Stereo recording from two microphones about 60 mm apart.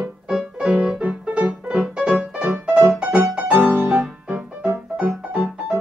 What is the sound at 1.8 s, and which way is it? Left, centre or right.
Music, centre.